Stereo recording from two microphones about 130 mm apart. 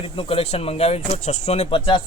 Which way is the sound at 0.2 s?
45° left (ahead or behind).